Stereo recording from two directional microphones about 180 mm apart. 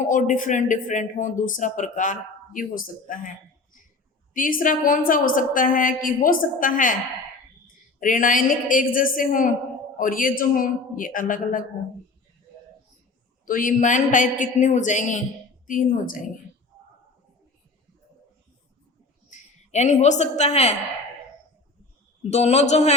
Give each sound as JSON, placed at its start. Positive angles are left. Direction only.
{"t": 0.0, "sound": "speech", "side_deg": 45}
{"t": 4.4, "sound": "speech", "side_deg": 50}
{"t": 13.4, "sound": "speech", "side_deg": 50}
{"t": 19.3, "sound": "speech", "side_deg": 40}
{"t": 22.3, "sound": "speech", "side_deg": 35}